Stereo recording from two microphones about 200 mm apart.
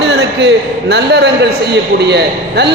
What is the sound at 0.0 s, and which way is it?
A man's voice, 55° right (ahead or behind).